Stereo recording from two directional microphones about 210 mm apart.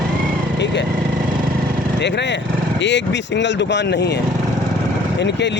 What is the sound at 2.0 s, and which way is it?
Speech, 55° left (ahead or behind).